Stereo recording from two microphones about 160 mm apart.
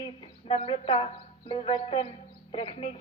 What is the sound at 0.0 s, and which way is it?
A woman's voice, 40° left (ahead or behind).